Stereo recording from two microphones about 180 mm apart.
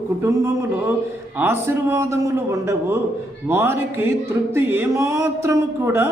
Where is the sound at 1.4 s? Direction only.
15° right (ahead or behind).